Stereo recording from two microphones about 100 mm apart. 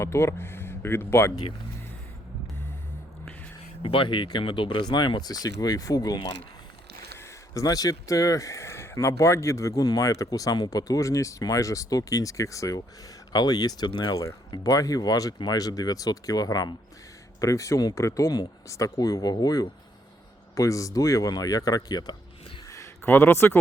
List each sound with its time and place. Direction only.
0.0 s speech: 25° left (ahead or behind)
3.8 s speech: 60° left (ahead or behind); by 22.1 s 40° left (ahead or behind)
23.0 s speech: 25° left (ahead or behind)